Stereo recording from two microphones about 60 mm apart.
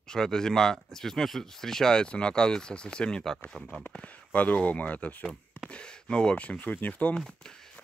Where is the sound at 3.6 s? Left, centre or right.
Centre.